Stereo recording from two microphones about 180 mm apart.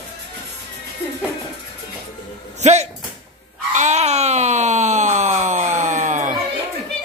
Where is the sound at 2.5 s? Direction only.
40° right (ahead or behind).